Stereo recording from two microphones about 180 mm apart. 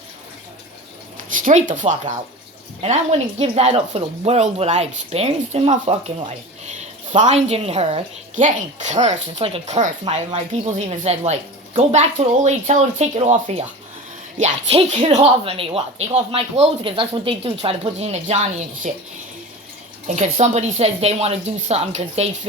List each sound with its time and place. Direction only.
1.3 s speech: 45° right (ahead or behind)
20.1 s speech: 40° right (ahead or behind)